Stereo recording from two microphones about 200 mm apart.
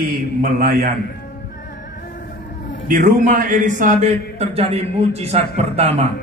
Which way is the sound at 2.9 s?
40° right (ahead or behind).